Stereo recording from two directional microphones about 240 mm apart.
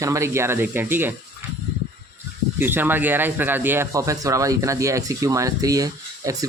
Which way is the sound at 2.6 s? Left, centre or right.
Centre.